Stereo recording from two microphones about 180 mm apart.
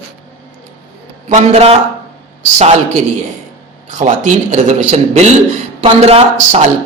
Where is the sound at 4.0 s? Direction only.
40° right (ahead or behind).